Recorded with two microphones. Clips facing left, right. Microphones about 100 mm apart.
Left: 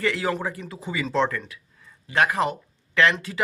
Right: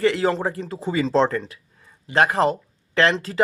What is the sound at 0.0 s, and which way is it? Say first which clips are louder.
Speech: right 5 dB; 25° right (ahead or behind).